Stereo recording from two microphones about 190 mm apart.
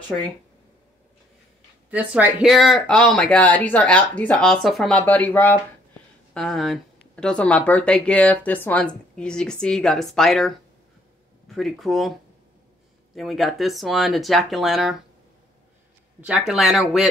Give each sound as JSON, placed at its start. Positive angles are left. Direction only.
{"t": 1.9, "sound": "speech", "side_deg": -10}
{"t": 13.1, "sound": "speech", "side_deg": 0}
{"t": 16.2, "sound": "speech", "side_deg": -5}